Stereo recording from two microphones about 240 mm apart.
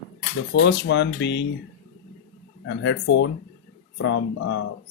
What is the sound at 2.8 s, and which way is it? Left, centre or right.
Speech, left.